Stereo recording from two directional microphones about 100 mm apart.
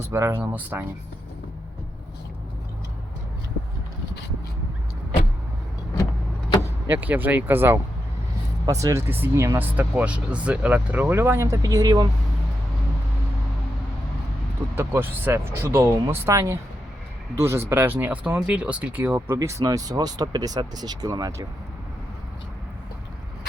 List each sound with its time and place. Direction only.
0.1 s speech: 25° right (ahead or behind)
6.8 s speech: 20° right (ahead or behind)
8.6 s speech: 35° right (ahead or behind)
9.7 s speech: 15° right (ahead or behind); by 12.0 s 35° right (ahead or behind)
14.8 s speech: 20° right (ahead or behind)
19.4 s speech: 35° right (ahead or behind)